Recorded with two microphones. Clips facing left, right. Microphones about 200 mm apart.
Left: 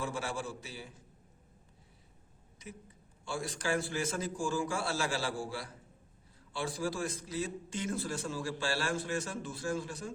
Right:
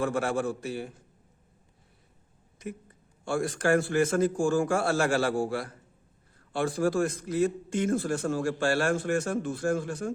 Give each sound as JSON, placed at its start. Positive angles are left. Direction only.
{"t": 0.0, "sound": "a man's voice", "side_deg": -55}
{"t": 3.2, "sound": "a man's voice", "side_deg": -55}